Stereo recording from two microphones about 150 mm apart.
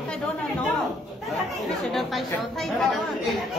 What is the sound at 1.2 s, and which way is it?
Speech, centre (ahead or behind).